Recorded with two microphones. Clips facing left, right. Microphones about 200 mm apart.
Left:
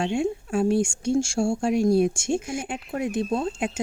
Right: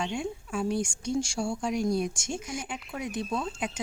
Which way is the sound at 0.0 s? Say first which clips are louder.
Left 8 dB; 70° left (ahead or behind).